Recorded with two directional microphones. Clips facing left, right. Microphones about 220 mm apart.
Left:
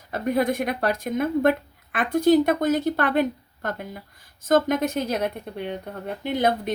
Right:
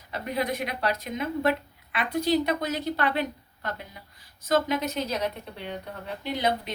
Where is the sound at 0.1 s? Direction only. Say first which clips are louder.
Left 7 dB; 50° left (ahead or behind).